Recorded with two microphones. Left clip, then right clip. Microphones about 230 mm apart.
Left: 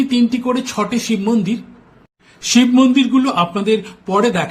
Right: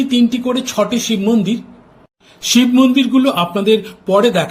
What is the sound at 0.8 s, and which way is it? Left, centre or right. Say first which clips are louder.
Speech: right 2 dB; left.